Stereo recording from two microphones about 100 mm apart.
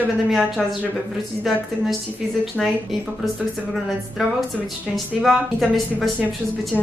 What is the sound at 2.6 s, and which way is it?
Speech, 5° left (ahead or behind).